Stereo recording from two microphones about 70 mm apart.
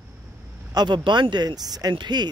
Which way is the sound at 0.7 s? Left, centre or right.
Right.